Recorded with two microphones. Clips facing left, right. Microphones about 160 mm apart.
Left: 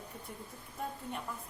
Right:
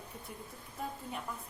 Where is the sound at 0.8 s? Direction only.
Centre (ahead or behind).